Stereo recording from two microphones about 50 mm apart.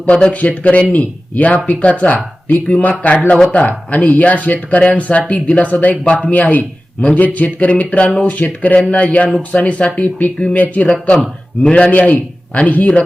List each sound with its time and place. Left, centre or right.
0.0 s speech: left
8.0 s speech: centre
8.3 s speech: left